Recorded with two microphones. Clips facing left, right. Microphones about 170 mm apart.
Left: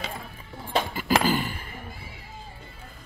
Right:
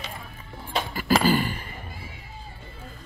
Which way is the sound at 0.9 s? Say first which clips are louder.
Right 3 dB; 15° left (ahead or behind).